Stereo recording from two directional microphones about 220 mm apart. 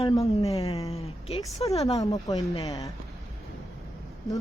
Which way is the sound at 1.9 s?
15° left (ahead or behind).